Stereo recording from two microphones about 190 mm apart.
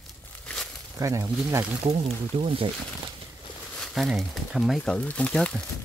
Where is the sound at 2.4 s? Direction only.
30° right (ahead or behind).